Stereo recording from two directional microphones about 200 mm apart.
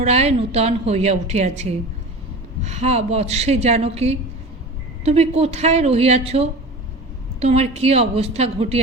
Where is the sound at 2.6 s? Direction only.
35° right (ahead or behind).